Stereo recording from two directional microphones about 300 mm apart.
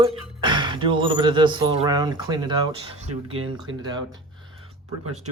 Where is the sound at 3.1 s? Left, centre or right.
Right.